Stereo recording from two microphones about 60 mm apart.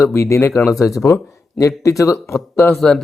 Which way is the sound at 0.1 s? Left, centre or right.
Left.